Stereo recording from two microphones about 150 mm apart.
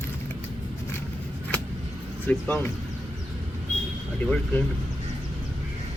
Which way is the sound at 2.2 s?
10° left (ahead or behind).